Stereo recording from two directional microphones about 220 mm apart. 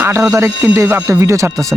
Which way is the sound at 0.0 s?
15° right (ahead or behind).